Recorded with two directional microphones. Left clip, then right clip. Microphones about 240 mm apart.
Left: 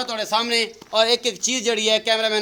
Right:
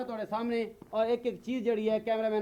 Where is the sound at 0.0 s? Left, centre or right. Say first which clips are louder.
Left 12 dB; left.